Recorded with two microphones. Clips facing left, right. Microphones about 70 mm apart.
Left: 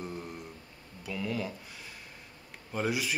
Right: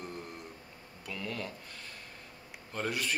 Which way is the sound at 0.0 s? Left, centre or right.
Centre.